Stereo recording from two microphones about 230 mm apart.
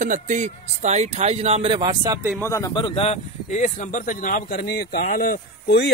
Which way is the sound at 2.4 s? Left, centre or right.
Centre.